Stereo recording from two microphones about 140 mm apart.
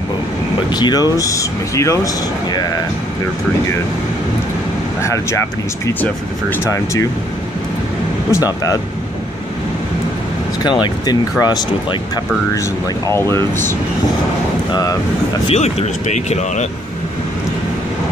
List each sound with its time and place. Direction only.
0.7 s speech: 30° left (ahead or behind)
5.0 s speech: 20° left (ahead or behind)
8.3 s speech: 25° left (ahead or behind)
10.6 s speech: 30° left (ahead or behind)
14.7 s speech: 25° left (ahead or behind)
15.4 s speech: 50° left (ahead or behind)